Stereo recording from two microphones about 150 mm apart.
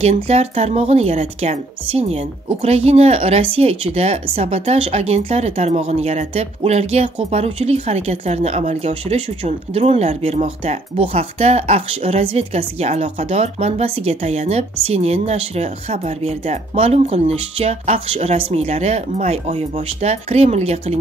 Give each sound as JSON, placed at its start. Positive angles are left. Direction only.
{"t": 0.0, "sound": "a woman's voice", "side_deg": -45}